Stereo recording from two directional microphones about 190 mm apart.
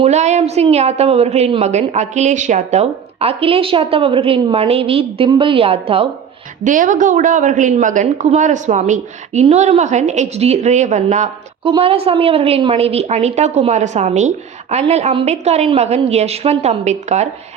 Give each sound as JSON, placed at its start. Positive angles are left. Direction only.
{"t": 0.0, "sound": "a woman's voice", "side_deg": -35}
{"t": 6.7, "sound": "a woman's voice", "side_deg": -45}